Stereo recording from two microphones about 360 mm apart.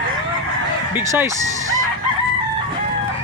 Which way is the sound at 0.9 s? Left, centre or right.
Centre.